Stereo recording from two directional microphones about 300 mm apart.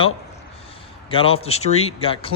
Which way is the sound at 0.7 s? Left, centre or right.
Centre.